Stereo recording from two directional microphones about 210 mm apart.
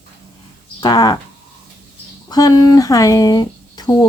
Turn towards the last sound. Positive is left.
turn(degrees=20)  # may be behind; listen again after turning